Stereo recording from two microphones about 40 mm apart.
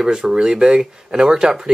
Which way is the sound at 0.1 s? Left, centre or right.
Centre.